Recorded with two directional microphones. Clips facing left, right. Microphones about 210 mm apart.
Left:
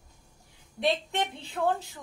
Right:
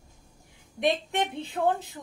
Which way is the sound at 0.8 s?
20° right (ahead or behind).